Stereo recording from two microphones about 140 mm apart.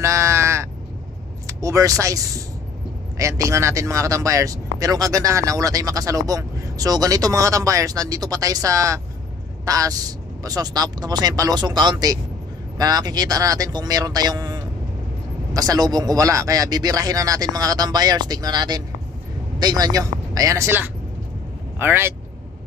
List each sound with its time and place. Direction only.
0.0 s caw: 20° right (ahead or behind)
1.5 s a man's voice: 25° right (ahead or behind)